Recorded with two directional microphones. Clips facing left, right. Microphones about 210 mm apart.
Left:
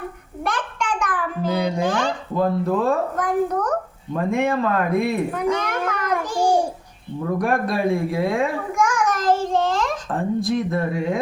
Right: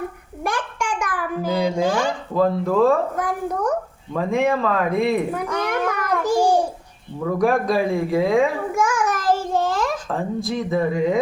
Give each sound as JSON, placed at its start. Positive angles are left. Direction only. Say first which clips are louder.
{"t": 0.4, "sound": "babbling", "louder": "even", "side_deg": -10}
{"t": 2.4, "sound": "speech", "louder": "right 3 dB", "side_deg": 0}
{"t": 4.3, "sound": "a sound", "louder": "right 1 dB", "side_deg": 0}
{"t": 7.3, "sound": "babbling", "louder": "right 4 dB", "side_deg": 0}